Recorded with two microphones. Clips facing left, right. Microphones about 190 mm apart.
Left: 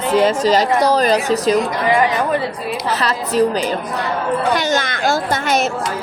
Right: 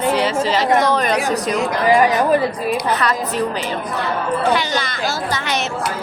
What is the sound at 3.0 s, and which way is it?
A woman's voice, 35° left (ahead or behind).